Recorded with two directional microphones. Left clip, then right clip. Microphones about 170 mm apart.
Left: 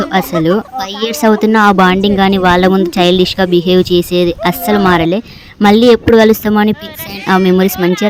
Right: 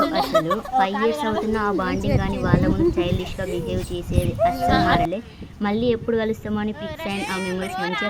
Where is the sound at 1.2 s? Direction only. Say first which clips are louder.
Left 14 dB; 50° left (ahead or behind).